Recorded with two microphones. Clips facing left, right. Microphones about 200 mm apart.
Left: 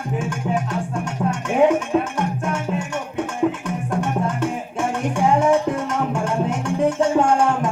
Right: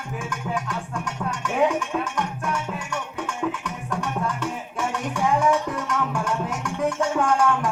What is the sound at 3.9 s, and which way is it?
Music, 25° left (ahead or behind).